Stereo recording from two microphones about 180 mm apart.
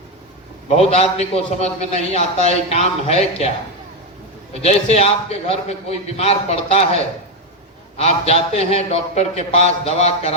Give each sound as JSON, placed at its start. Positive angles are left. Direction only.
{"t": 0.7, "sound": "a man's voice", "side_deg": 35}
{"t": 4.6, "sound": "a man's voice", "side_deg": 40}